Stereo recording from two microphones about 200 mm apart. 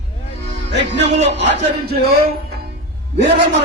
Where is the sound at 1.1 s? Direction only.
60° right (ahead or behind).